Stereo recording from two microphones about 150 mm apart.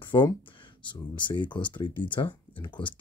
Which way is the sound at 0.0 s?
35° left (ahead or behind).